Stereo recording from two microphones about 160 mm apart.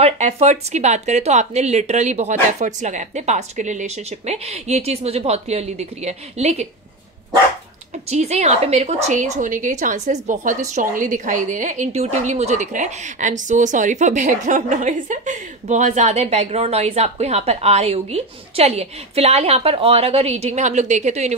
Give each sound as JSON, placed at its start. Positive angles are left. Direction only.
{"t": 0.0, "sound": "a woman's voice", "side_deg": -40}
{"t": 8.1, "sound": "a woman's voice", "side_deg": -45}